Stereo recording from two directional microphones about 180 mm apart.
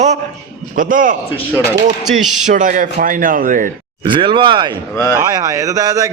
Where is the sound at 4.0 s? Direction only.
25° right (ahead or behind).